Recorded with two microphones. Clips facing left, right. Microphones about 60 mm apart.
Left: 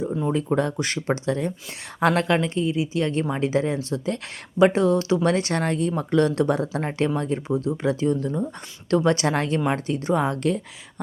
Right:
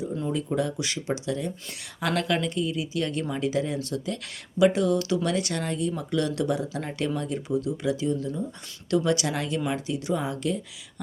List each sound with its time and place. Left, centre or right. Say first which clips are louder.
0.4 s speech: left 4 dB; left